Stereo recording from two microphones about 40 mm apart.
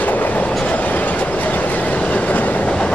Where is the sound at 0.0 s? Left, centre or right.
Left.